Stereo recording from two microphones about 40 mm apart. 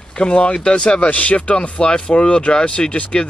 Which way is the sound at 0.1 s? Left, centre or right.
Left.